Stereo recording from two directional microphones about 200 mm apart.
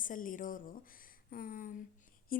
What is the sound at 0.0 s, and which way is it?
A woman's voice, 40° left (ahead or behind).